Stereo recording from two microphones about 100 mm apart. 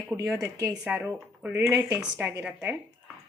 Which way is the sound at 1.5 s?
25° right (ahead or behind).